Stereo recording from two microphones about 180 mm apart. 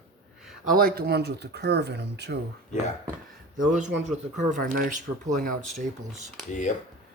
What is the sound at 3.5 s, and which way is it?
Speech, 45° right (ahead or behind).